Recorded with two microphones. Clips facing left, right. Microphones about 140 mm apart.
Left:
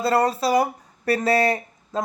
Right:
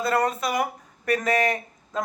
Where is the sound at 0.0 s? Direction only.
30° left (ahead or behind).